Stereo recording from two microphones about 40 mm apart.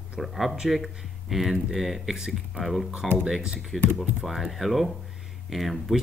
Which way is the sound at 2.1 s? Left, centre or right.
Centre.